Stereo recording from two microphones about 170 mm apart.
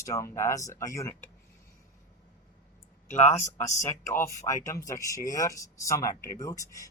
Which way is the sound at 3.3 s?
15° left (ahead or behind).